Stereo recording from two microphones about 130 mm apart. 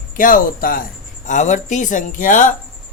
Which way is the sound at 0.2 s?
90° left.